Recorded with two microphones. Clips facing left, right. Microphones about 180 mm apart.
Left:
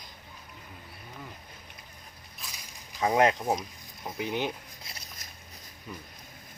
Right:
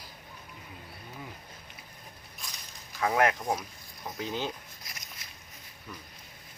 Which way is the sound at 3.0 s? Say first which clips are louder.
Left 2 dB; 20° left (ahead or behind).